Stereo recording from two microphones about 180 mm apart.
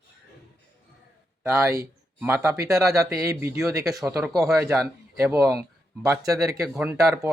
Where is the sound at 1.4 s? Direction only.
15° right (ahead or behind).